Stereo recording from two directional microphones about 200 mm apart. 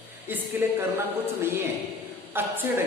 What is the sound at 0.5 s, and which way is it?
Speech, 10° right (ahead or behind).